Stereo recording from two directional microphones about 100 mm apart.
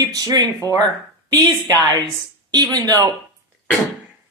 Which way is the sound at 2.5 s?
40° right (ahead or behind).